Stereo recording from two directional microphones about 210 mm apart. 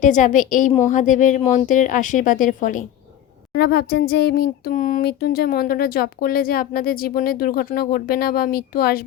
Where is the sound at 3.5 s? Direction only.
50° left (ahead or behind).